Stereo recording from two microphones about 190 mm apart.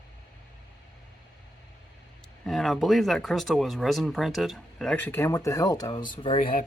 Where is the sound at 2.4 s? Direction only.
Centre (ahead or behind); by 6.5 s 30° left (ahead or behind).